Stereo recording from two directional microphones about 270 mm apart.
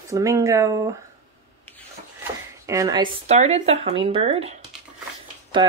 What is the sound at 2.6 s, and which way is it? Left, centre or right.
Speech, centre.